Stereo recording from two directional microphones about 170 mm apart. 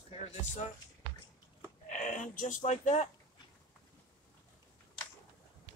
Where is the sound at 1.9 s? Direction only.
50° left (ahead or behind).